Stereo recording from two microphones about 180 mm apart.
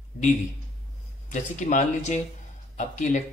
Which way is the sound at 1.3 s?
45° left (ahead or behind).